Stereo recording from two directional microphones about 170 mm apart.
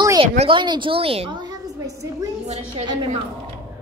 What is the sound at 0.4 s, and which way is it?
A woman's voice, 30° right (ahead or behind).